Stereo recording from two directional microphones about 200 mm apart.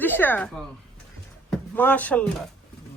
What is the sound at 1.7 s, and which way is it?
Speech, 10° left (ahead or behind).